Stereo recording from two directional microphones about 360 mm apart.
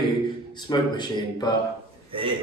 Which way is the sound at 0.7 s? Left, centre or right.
Centre.